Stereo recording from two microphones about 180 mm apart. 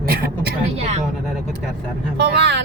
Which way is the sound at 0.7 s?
40° right (ahead or behind).